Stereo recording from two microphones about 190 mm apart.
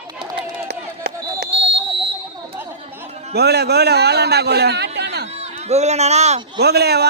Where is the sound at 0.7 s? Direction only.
60° right (ahead or behind).